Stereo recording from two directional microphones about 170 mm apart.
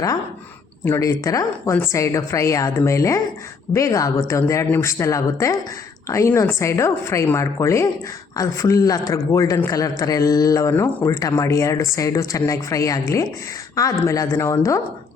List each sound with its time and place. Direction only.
0.9 s a woman's voice: 15° left (ahead or behind)